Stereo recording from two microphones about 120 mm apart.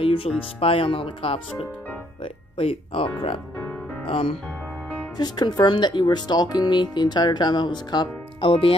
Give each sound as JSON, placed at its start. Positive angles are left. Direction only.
{"t": 0.0, "sound": "music", "side_deg": 50}
{"t": 0.6, "sound": "speech", "side_deg": 50}
{"t": 5.1, "sound": "speech", "side_deg": 35}
{"t": 8.4, "sound": "speech", "side_deg": 50}